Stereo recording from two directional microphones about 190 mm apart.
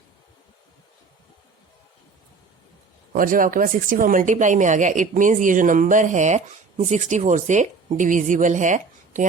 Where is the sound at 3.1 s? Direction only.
45° right (ahead or behind).